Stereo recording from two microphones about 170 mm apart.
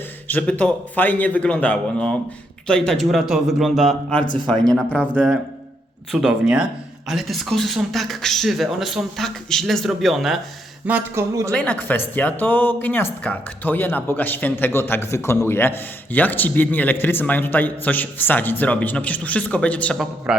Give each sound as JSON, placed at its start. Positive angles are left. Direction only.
{"t": 0.3, "sound": "speech", "side_deg": 10}
{"t": 6.1, "sound": "speech", "side_deg": -5}
{"t": 10.8, "sound": "speech", "side_deg": -10}
{"t": 11.5, "sound": "speech", "side_deg": 5}